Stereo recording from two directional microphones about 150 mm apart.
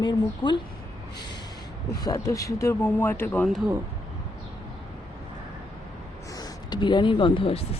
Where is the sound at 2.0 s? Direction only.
20° left (ahead or behind).